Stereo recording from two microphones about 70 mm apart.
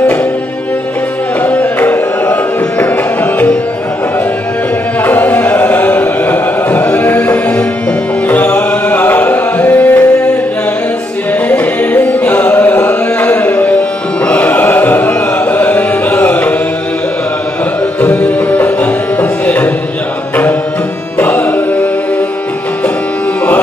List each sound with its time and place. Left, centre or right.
1.4 s music: left
5.0 s music: left
11.4 s music: left
18.0 s music: left
21.2 s music: left